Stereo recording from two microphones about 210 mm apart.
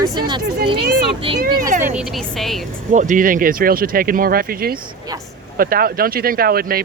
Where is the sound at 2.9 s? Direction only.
35° right (ahead or behind).